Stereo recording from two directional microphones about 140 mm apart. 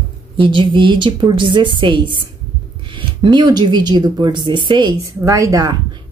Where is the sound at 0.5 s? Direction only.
35° right (ahead or behind).